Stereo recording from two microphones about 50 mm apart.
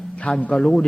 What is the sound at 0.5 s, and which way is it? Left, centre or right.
Speech, centre.